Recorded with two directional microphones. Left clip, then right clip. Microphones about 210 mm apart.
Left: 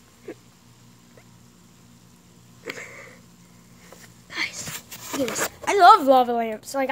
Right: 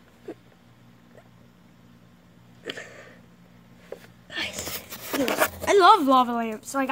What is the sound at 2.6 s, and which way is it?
Sniff, 15° right (ahead or behind).